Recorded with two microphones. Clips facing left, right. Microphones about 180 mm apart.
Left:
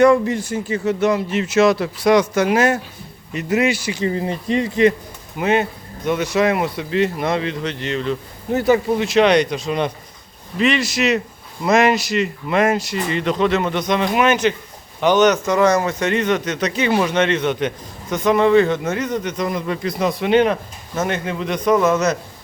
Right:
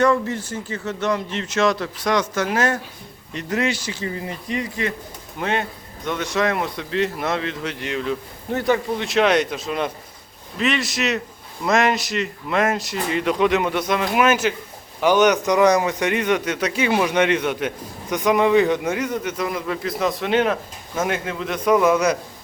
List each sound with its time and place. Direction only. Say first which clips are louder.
0.0 s speech: left 5 dB; 15° left (ahead or behind)
4.0 s speech: left 10 dB; 30° left (ahead or behind)
5.4 s speech: left 6 dB; 5° left (ahead or behind)
8.5 s a man's voice: left 5 dB; 5° left (ahead or behind); by 22.2 s 10° right (ahead or behind)